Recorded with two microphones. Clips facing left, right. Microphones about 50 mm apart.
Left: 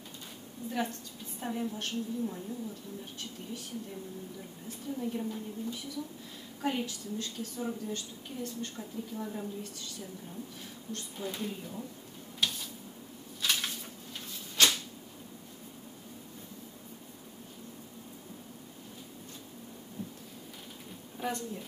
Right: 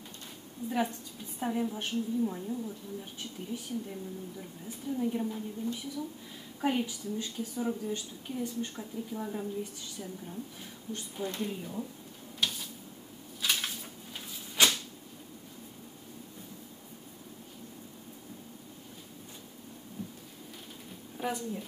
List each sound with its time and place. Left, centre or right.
0.7 s a woman's voice: centre
11.2 s a woman's voice: centre
12.4 s a sound: centre
14.6 s cupboard open or close: centre
21.2 s a woman's voice: centre